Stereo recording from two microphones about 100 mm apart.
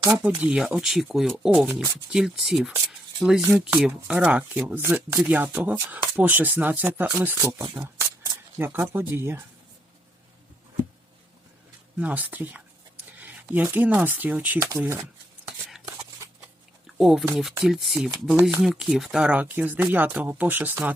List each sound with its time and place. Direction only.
0.1 s speech: 20° right (ahead or behind)
0.5 s speech: 5° right (ahead or behind); by 7.3 s 20° right (ahead or behind)
7.4 s speech: 40° right (ahead or behind)
8.5 s speech: 25° right (ahead or behind)
11.9 s speech: 15° right (ahead or behind)
16.8 s a sound: centre (ahead or behind)
17.3 s speech: centre (ahead or behind); by 20.9 s 20° right (ahead or behind)